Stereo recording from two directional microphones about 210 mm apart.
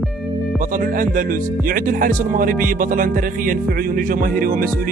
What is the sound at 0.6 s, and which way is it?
Speech, 40° right (ahead or behind).